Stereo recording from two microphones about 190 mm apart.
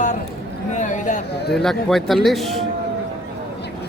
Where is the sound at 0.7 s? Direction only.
40° left (ahead or behind).